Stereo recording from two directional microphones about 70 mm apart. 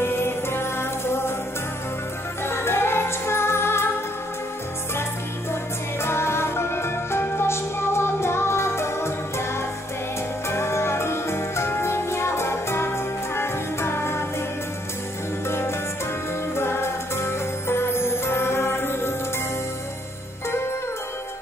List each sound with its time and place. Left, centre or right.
0.0 s music: left
2.4 s music: left
5.5 s music: left
15.4 s music: left